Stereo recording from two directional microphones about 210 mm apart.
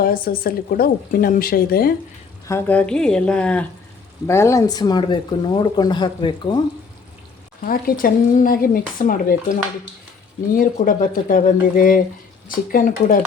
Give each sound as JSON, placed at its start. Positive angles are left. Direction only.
{"t": 0.0, "sound": "speech", "side_deg": 45}
{"t": 2.5, "sound": "speech", "side_deg": 10}
{"t": 7.6, "sound": "speech", "side_deg": 45}